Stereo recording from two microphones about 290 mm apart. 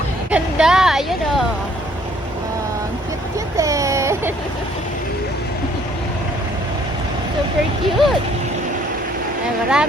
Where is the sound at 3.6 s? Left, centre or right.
Centre.